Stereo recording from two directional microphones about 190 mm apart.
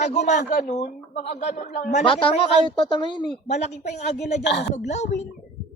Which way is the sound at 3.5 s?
35° left (ahead or behind).